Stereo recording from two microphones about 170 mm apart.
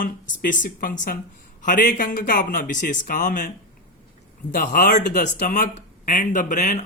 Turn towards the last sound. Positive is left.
turn(degrees=45)  # may be behind; listen again after turning